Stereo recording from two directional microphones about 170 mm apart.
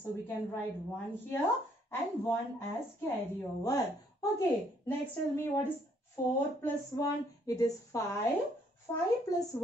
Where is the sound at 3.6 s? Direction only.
20° left (ahead or behind).